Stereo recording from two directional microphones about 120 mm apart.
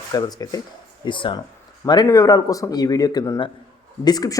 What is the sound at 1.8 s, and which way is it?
Speech, 30° left (ahead or behind).